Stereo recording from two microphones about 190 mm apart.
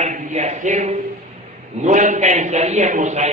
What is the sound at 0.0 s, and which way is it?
A man's voice, 40° right (ahead or behind).